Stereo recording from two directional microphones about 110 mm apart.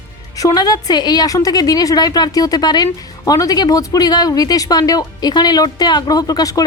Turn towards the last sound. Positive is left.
turn(degrees=35)  # may be behind; listen again after turning